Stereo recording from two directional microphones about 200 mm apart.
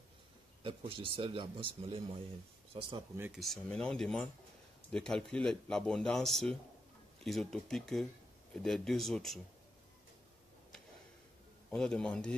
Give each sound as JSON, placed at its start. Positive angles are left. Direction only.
{"t": 0.7, "sound": "a man's voice", "side_deg": -25}
{"t": 3.2, "sound": "speech", "side_deg": 0}
{"t": 11.7, "sound": "speech", "side_deg": 5}